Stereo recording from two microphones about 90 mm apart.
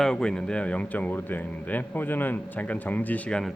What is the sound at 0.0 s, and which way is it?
Speech, 10° left (ahead or behind).